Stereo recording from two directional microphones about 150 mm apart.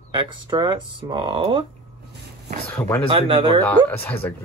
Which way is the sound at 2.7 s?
10° left (ahead or behind).